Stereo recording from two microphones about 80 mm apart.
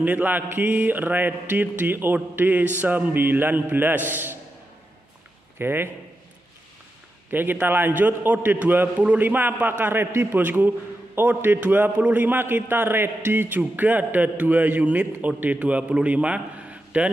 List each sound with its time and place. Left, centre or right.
0.0 s a man's voice: right
5.6 s a man's voice: right
7.2 s a man's voice: right